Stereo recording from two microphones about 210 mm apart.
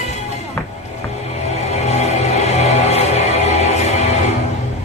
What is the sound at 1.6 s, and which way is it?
Music, 30° left (ahead or behind).